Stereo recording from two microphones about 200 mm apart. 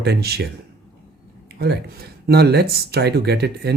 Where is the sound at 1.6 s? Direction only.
55° right (ahead or behind).